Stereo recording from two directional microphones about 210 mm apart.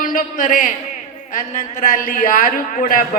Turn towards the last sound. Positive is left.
turn(degrees=40)  # may be behind; listen again after turning